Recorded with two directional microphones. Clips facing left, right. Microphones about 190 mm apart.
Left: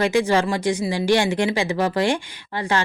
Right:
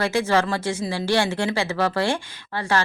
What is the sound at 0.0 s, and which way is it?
Speech, 15° left (ahead or behind).